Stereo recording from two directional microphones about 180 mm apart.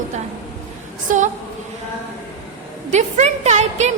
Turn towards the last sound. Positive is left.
turn(degrees=-40)  # may be behind; listen again after turning